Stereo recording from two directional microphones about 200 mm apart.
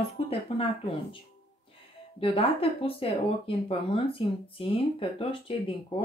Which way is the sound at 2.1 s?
30° left (ahead or behind).